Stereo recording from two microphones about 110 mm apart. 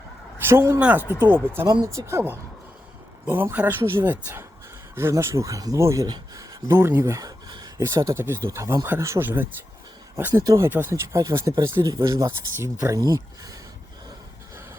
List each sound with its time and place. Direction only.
0.4 s speech: 25° right (ahead or behind)
2.0 s speech: 25° right (ahead or behind)
6.7 s speech: 20° right (ahead or behind)
7.2 s a sound: 35° right (ahead or behind)
7.8 s speech: 25° right (ahead or behind)
10.7 s speech: 20° right (ahead or behind)